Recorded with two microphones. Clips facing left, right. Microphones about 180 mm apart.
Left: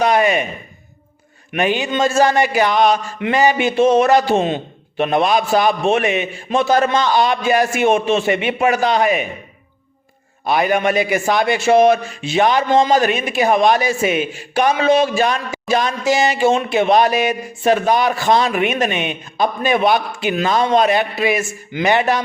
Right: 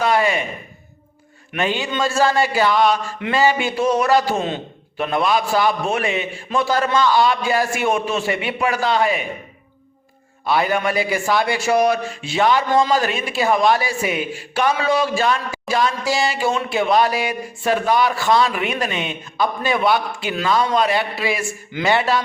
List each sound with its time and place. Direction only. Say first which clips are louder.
0.0 s a man's voice: left 3 dB; 20° left (ahead or behind)
1.5 s a man's voice: left 4 dB; 20° left (ahead or behind)
10.4 s a man's voice: left 3 dB; 20° left (ahead or behind)